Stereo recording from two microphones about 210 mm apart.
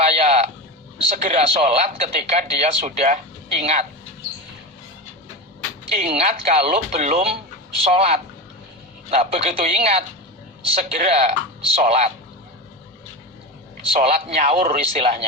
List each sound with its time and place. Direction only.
0.1 s a sound: 30° right (ahead or behind)
1.1 s speech: 35° right (ahead or behind)
5.9 s speech: 30° right (ahead or behind)
13.9 s speech: 30° right (ahead or behind)